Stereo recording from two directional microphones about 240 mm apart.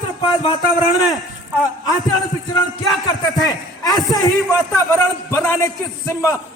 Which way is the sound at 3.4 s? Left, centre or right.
Centre.